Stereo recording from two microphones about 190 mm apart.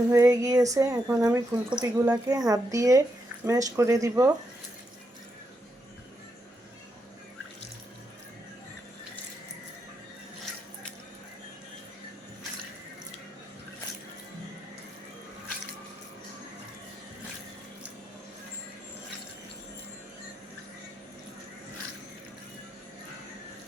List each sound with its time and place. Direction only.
0.1 s speech: 15° right (ahead or behind)